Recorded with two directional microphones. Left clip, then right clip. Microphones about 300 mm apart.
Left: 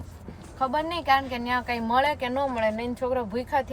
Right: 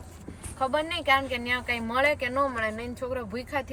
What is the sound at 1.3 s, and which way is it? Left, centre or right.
Speech, left.